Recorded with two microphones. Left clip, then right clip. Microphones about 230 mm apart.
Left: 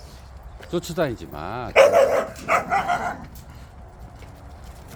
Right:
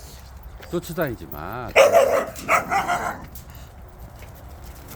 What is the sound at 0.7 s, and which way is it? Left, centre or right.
Speech, centre.